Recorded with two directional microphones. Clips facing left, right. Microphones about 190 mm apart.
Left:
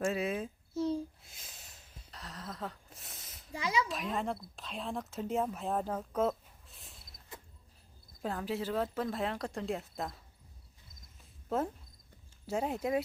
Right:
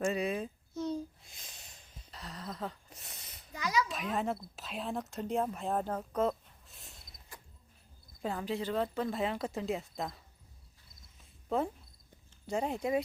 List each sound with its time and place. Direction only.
0.0 s a sound: centre (ahead or behind)
3.5 s speech: 25° left (ahead or behind)
3.8 s speech: centre (ahead or behind)
8.2 s speech: centre (ahead or behind)
11.4 s speech: centre (ahead or behind)